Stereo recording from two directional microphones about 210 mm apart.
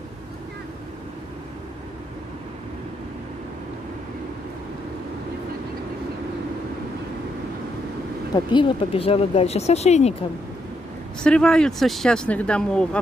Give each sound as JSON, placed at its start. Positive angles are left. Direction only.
{"t": 8.5, "sound": "speech", "side_deg": 25}
{"t": 11.2, "sound": "speech", "side_deg": 5}